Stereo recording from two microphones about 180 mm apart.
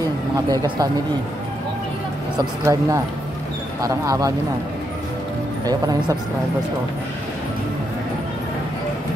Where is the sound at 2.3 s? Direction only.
20° right (ahead or behind).